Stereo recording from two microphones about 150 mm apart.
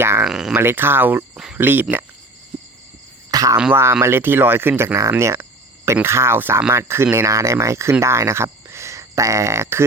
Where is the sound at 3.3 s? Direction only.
25° right (ahead or behind).